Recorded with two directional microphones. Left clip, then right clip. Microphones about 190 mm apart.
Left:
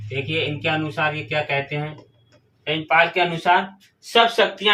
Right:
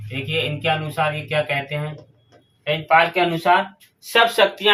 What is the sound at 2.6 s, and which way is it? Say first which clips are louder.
Speech: right 2 dB; 30° right (ahead or behind).